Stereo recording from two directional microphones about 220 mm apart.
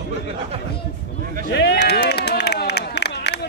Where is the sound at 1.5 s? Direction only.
50° left (ahead or behind).